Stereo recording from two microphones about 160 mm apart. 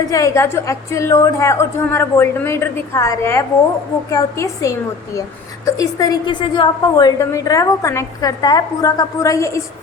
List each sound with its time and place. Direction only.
0.1 s a woman's voice: 20° left (ahead or behind)